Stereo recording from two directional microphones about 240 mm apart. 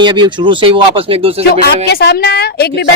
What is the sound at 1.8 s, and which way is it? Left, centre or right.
Speech, left.